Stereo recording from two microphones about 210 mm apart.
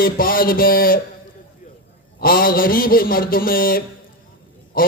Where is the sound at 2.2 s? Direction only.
45° left (ahead or behind).